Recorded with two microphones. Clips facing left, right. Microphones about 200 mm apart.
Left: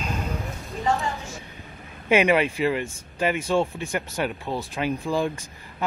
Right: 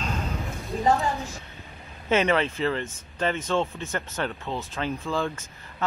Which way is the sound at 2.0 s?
15° left (ahead or behind).